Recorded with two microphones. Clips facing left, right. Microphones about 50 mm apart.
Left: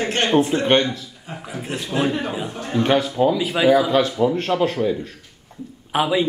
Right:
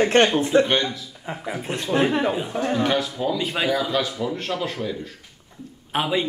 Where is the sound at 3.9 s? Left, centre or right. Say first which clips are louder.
Left 7 dB; left.